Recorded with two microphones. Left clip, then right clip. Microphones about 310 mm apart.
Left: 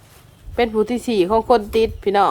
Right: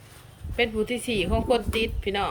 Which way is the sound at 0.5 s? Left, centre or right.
Centre.